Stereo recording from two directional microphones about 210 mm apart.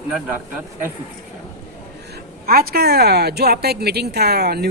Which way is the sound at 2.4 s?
45° right (ahead or behind).